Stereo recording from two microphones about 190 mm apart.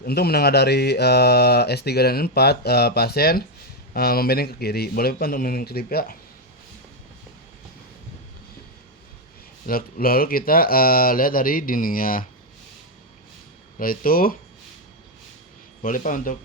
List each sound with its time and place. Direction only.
0.0 s speech: 55° left (ahead or behind)
9.6 s speech: 50° left (ahead or behind)
13.7 s speech: 50° left (ahead or behind)
15.8 s speech: 45° left (ahead or behind)